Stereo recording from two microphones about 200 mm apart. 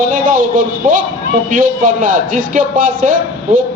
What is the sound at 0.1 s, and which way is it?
A man's voice, 40° right (ahead or behind).